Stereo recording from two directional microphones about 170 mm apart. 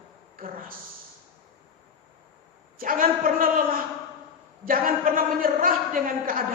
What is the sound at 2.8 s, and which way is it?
Speech, 55° right (ahead or behind).